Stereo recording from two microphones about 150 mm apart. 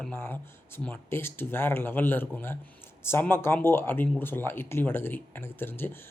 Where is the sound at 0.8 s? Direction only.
15° left (ahead or behind).